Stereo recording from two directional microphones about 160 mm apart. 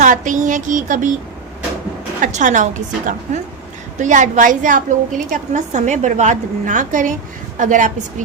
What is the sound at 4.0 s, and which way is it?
A woman's voice, 50° right (ahead or behind).